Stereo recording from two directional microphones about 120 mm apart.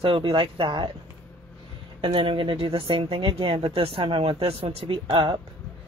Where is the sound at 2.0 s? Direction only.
45° right (ahead or behind).